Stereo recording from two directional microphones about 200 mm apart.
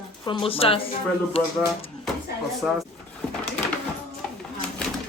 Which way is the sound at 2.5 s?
Centre (ahead or behind).